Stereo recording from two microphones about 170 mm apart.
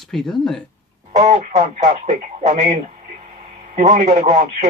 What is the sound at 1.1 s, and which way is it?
Speech, 40° right (ahead or behind).